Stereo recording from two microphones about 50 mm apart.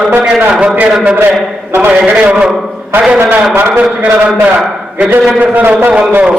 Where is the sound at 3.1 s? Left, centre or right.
Right.